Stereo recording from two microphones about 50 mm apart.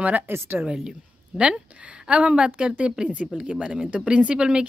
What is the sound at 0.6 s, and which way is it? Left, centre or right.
Speech, centre.